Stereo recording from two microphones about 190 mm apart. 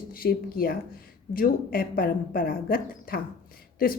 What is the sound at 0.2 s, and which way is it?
A woman's voice, 50° left (ahead or behind).